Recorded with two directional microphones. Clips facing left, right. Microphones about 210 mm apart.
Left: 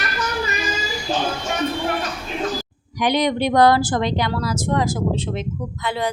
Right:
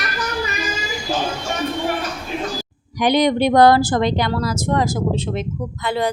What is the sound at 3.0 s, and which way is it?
Speech, 35° right (ahead or behind).